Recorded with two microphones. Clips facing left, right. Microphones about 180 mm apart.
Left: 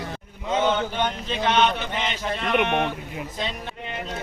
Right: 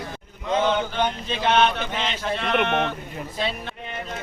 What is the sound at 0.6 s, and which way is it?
A man's voice, 5° left (ahead or behind).